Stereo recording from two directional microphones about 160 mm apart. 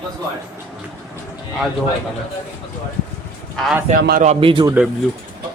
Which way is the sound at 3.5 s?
Centre (ahead or behind).